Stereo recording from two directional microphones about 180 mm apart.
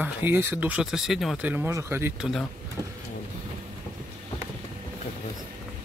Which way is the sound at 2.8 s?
20° right (ahead or behind).